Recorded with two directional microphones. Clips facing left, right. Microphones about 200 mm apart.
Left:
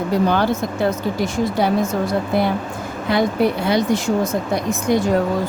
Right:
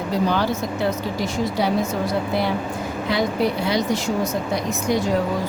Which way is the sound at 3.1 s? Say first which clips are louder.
Left 4 dB; 55° left (ahead or behind).